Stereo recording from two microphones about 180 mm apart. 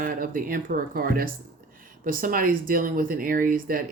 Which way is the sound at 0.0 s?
50° right (ahead or behind).